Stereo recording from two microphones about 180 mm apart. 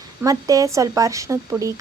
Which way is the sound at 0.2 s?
20° right (ahead or behind).